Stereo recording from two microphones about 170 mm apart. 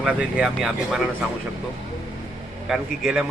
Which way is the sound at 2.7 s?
5° right (ahead or behind).